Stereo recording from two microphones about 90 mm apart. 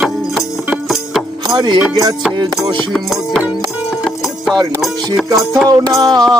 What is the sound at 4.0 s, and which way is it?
Music, centre (ahead or behind).